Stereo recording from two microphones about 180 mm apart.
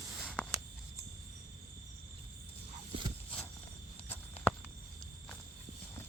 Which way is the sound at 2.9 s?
30° right (ahead or behind).